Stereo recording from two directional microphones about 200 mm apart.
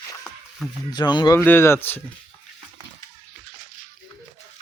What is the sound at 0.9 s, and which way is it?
Speech, 20° left (ahead or behind).